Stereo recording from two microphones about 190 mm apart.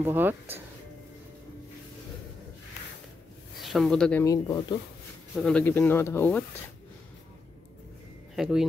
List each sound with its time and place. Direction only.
0.0 s speech: 10° right (ahead or behind)
3.6 s speech: centre (ahead or behind)
4.2 s speech: 20° left (ahead or behind)
5.3 s speech: 5° left (ahead or behind)
8.4 s speech: centre (ahead or behind)